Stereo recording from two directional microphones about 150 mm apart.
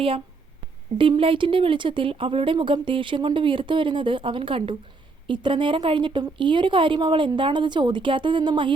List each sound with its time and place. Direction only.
0.9 s speech: 35° right (ahead or behind)